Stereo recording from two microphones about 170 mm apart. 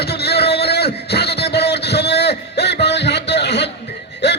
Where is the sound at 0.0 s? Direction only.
70° left (ahead or behind).